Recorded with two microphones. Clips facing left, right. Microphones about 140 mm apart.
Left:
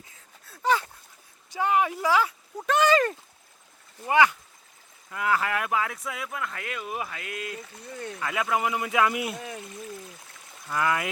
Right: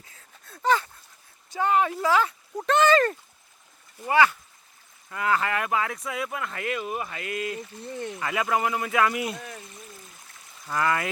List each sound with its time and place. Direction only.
0.4 s a sound: 10° left (ahead or behind)
2.6 s speech: 10° left (ahead or behind)
5.1 s speech: 5° left (ahead or behind)
10.7 s speech: 5° left (ahead or behind)